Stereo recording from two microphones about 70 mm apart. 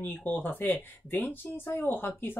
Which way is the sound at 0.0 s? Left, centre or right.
Left.